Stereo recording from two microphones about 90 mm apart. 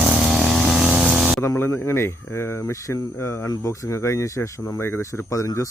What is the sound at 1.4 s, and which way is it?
Speech, 35° left (ahead or behind).